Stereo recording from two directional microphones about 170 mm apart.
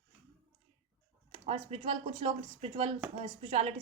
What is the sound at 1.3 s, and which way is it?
Speech, 35° right (ahead or behind).